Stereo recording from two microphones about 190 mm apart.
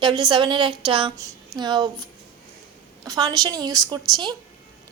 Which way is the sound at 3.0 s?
20° right (ahead or behind).